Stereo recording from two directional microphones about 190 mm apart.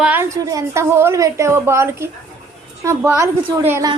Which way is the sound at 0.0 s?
10° right (ahead or behind).